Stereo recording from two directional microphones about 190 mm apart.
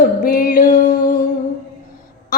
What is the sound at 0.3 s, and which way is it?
Music, 50° left (ahead or behind).